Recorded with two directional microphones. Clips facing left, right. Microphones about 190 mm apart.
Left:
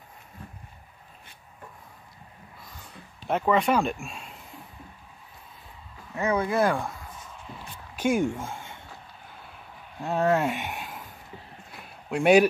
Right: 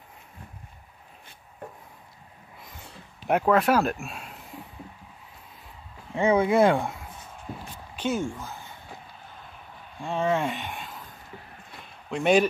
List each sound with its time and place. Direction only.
3.4 s speech: 5° right (ahead or behind)
6.1 s speech: 25° right (ahead or behind)
7.5 s a sound: 50° right (ahead or behind)
7.9 s speech: 10° left (ahead or behind)
8.3 s speech: 25° left (ahead or behind)
9.9 s speech: 5° left (ahead or behind)
11.7 s a sound: 5° left (ahead or behind)